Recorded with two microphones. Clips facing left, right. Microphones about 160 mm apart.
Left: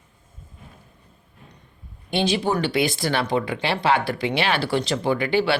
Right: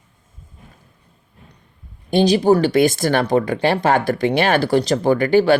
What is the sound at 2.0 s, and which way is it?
Speech, 40° right (ahead or behind).